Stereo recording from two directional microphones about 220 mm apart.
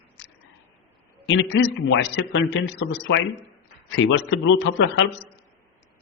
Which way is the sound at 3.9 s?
55° left (ahead or behind).